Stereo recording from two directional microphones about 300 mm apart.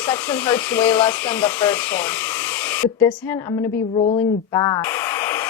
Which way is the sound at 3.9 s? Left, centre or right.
Centre.